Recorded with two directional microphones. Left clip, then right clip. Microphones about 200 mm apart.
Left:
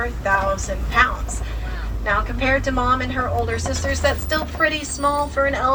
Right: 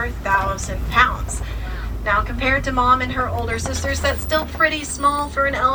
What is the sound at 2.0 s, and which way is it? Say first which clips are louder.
A woman's voice: right 1 dB; 55° left (ahead or behind).